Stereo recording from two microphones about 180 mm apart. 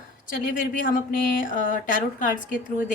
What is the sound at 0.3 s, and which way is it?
Speech, 50° left (ahead or behind).